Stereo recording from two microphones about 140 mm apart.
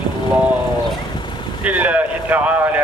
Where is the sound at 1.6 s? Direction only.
10° right (ahead or behind).